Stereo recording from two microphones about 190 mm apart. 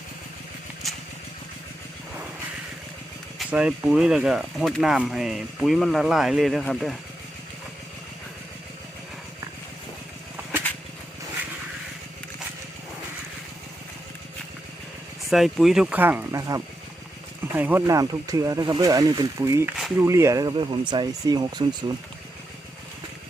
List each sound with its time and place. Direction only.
3.3 s speech: 5° right (ahead or behind)
15.3 s speech: centre (ahead or behind); by 21.8 s 20° right (ahead or behind)